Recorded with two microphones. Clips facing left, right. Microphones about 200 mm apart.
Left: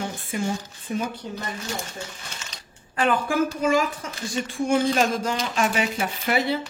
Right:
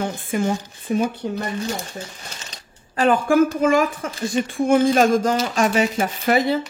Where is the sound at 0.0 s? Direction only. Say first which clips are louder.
Right 5 dB; 50° right (ahead or behind).